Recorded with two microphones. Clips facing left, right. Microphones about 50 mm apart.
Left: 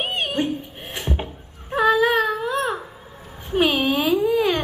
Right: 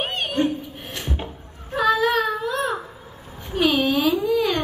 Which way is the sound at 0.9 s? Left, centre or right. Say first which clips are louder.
Left 3 dB; centre.